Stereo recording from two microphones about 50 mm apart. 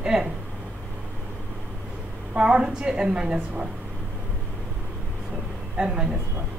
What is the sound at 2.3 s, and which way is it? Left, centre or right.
A woman's voice, centre.